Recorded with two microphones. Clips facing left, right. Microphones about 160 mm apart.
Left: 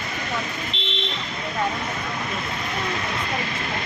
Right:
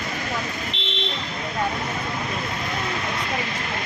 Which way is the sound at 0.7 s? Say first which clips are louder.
Left 1 dB; 60° right (ahead or behind).